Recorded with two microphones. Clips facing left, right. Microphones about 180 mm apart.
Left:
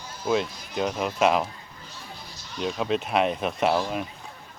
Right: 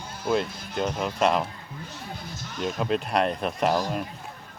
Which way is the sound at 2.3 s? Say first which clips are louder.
Left 1 dB; 50° right (ahead or behind).